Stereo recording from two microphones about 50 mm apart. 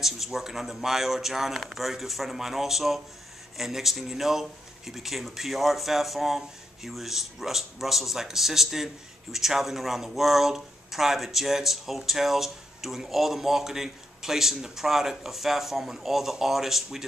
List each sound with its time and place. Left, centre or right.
0.0 s speech: centre